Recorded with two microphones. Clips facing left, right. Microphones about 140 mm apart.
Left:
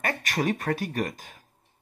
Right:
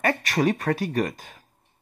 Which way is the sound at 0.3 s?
45° right (ahead or behind).